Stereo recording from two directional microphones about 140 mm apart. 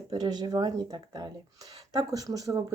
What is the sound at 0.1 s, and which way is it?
Speech, 30° right (ahead or behind).